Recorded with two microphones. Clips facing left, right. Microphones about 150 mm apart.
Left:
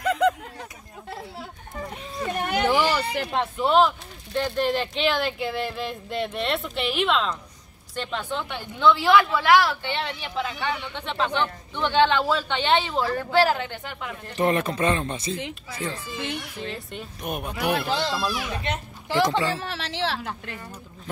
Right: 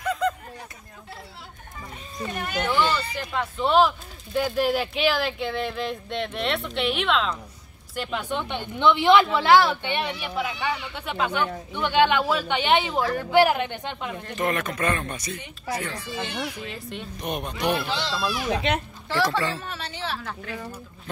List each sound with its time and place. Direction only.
0.0 s a sound: 70° left (ahead or behind)
2.1 s children playing: 60° left (ahead or behind)
3.5 s a woman's voice: centre (ahead or behind); by 14.1 s 20° right (ahead or behind)
14.3 s speech: 30° left (ahead or behind)
16.6 s speech: centre (ahead or behind)
17.8 s speech: 45° left (ahead or behind)
18.5 s a child's voice: 90° right
19.0 s speech: 20° left (ahead or behind)
19.6 s a woman's voice: 90° left